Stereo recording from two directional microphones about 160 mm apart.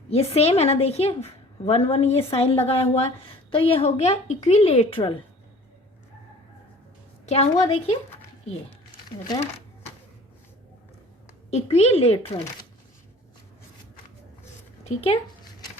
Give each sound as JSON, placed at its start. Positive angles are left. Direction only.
{"t": 0.1, "sound": "a woman's voice", "side_deg": 40}
{"t": 7.3, "sound": "a woman's voice", "side_deg": 40}
{"t": 11.5, "sound": "a woman's voice", "side_deg": 40}
{"t": 14.8, "sound": "speech", "side_deg": 40}